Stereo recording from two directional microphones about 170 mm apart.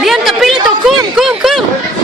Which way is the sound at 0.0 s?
Centre (ahead or behind).